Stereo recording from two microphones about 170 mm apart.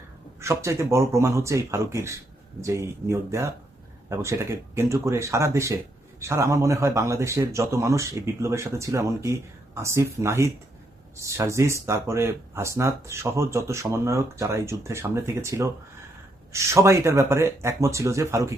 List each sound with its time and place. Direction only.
0.3 s speech: 15° right (ahead or behind)